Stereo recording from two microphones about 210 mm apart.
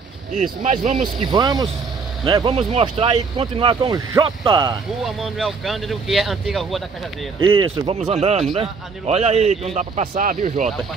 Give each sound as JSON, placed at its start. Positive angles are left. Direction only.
{"t": 0.3, "sound": "a man's voice", "side_deg": -35}
{"t": 1.2, "sound": "speech", "side_deg": -20}
{"t": 5.0, "sound": "speech", "side_deg": 0}
{"t": 7.3, "sound": "a man's voice", "side_deg": -25}